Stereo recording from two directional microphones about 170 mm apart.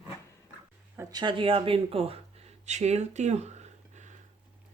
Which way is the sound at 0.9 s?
25° right (ahead or behind).